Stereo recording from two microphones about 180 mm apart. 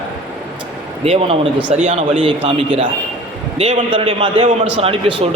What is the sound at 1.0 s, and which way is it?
A man's voice, 35° right (ahead or behind).